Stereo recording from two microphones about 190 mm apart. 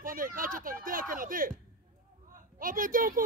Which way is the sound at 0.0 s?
45° right (ahead or behind).